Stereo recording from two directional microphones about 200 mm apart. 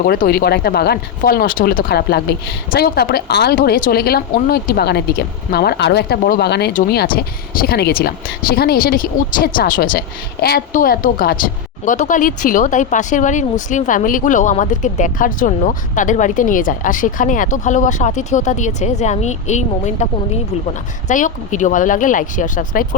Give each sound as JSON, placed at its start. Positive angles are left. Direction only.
{"t": 0.0, "sound": "speech", "side_deg": 45}